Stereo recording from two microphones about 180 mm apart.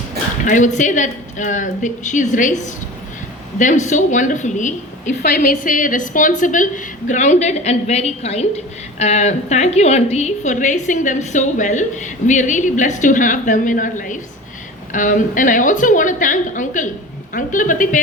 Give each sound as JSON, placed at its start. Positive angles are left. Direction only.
{"t": 0.4, "sound": "a woman's voice", "side_deg": 45}